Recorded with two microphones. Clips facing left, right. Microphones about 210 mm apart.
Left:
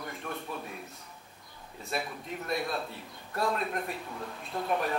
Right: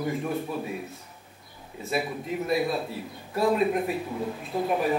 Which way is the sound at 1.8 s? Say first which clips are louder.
Right 7 dB; 5° right (ahead or behind).